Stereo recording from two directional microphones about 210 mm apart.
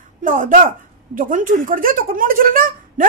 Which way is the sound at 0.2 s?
40° right (ahead or behind).